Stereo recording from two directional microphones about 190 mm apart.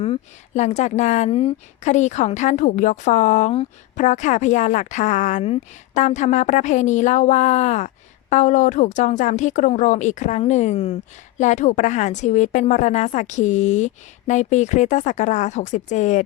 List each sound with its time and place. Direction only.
0.0 s speech: 35° left (ahead or behind)